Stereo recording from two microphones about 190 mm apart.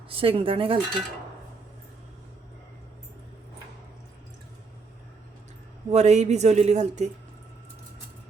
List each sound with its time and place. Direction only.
0.1 s cutlery: 30° right (ahead or behind)
5.9 s a man's voice: 35° right (ahead or behind)